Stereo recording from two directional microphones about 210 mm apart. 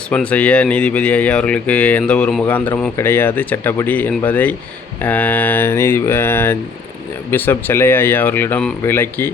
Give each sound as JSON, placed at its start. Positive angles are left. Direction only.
{"t": 0.1, "sound": "speech", "side_deg": 5}